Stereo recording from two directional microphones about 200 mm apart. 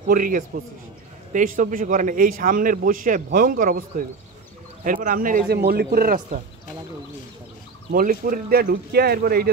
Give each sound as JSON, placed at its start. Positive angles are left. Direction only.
{"t": 0.1, "sound": "a man's voice", "side_deg": -40}
{"t": 4.8, "sound": "a man's voice", "side_deg": -45}
{"t": 7.9, "sound": "a man's voice", "side_deg": -40}